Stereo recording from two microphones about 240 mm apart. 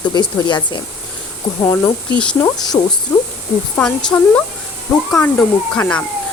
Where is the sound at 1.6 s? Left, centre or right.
Centre.